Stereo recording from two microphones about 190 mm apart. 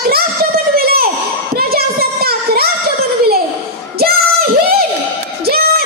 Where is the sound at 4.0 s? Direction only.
55° right (ahead or behind).